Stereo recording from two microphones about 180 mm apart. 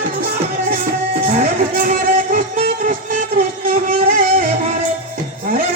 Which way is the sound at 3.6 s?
50° right (ahead or behind).